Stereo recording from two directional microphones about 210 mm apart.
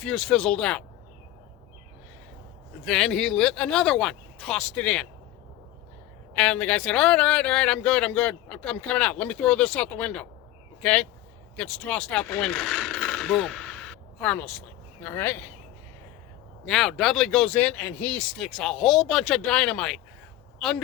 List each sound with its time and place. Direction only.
0.0 s speech: 5° left (ahead or behind)
2.8 s speech: 5° left (ahead or behind)
6.3 s speech: 5° left (ahead or behind)
16.6 s a man's voice: centre (ahead or behind)